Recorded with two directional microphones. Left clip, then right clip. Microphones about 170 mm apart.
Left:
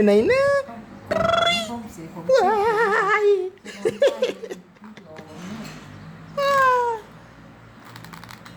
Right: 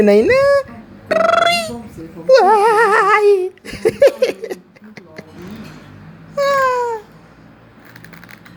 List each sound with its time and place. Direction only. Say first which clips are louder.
0.0 s speech: right 6 dB; 25° right (ahead or behind)
1.0 s cat: right 7 dB; 25° right (ahead or behind)
2.2 s a sound: right 8 dB; 25° right (ahead or behind)
6.4 s cat: right 3 dB; 25° right (ahead or behind)